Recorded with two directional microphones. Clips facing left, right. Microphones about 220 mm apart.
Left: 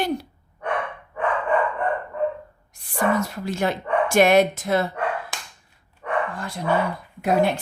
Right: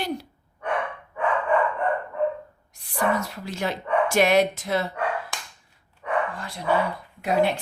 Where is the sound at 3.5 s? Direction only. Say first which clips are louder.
Left 2 dB; 50° left (ahead or behind).